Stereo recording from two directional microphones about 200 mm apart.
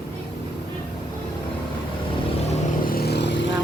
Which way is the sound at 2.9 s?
55° left (ahead or behind).